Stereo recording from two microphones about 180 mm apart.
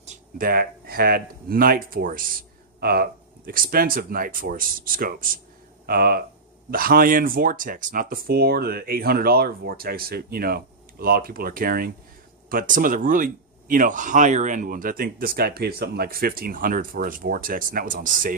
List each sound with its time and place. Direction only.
0.0 s speech: 50° right (ahead or behind)